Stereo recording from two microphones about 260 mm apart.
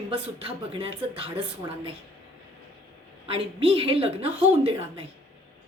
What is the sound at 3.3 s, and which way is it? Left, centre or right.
A woman's voice, right.